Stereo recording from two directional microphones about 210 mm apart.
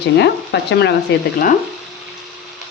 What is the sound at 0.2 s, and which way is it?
Speech, 55° left (ahead or behind).